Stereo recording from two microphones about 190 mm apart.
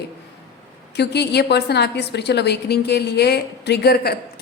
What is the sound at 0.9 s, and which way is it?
A woman's voice, 60° left (ahead or behind).